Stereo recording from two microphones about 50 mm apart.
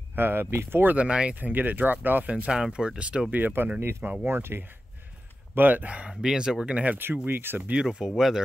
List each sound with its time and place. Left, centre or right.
0.1 s speech: right
0.9 s speech: right
1.3 s speech: right
2.4 s speech: centre
3.3 s speech: right
4.3 s speech: right
5.5 s speech: right
6.2 s speech: centre
7.0 s speech: right
7.7 s speech: centre